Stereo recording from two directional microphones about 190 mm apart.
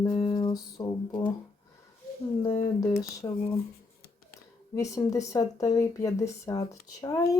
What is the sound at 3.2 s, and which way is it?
Speech, 20° left (ahead or behind).